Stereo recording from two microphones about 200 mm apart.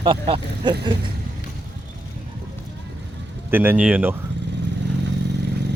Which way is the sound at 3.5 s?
10° right (ahead or behind).